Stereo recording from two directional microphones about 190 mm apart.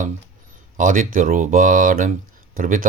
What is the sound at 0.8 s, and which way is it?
A man's voice, 45° right (ahead or behind).